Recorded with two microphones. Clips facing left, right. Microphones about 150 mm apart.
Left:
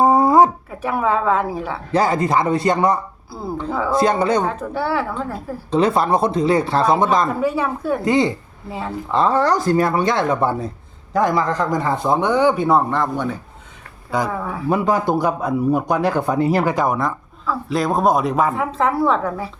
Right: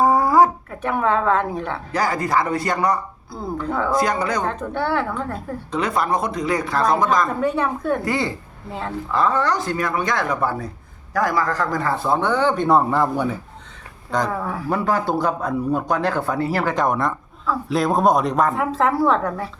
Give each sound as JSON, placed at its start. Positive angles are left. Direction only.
{"t": 0.0, "sound": "a sound", "side_deg": 20}
{"t": 0.7, "sound": "speech", "side_deg": 5}
{"t": 1.9, "sound": "speech", "side_deg": 25}
{"t": 3.7, "sound": "speech", "side_deg": 5}
{"t": 3.9, "sound": "speech", "side_deg": 25}
{"t": 4.4, "sound": "speech", "side_deg": 5}
{"t": 5.7, "sound": "speech", "side_deg": 30}
{"t": 7.3, "sound": "speech", "side_deg": 5}
{"t": 8.0, "sound": "speech", "side_deg": 20}
{"t": 9.1, "sound": "speech", "side_deg": 30}
{"t": 12.6, "sound": "speech", "side_deg": -5}
{"t": 14.1, "sound": "speech", "side_deg": 5}
{"t": 14.7, "sound": "speech", "side_deg": 15}